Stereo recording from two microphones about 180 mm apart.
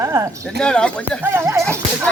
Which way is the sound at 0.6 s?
5° left (ahead or behind).